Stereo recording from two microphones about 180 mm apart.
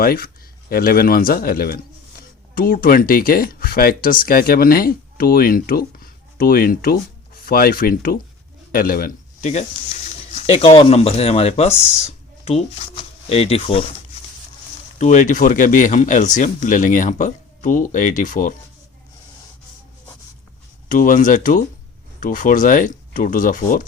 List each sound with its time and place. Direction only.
0.0 s a man's voice: 55° left (ahead or behind); by 13.9 s 30° left (ahead or behind)
14.9 s speech: 45° left (ahead or behind)
20.9 s speech: 50° left (ahead or behind)